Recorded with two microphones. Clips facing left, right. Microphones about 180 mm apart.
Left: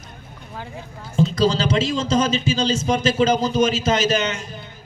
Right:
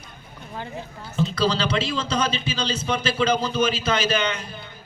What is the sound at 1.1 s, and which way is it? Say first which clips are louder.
Speech: left 4 dB; 40° left (ahead or behind).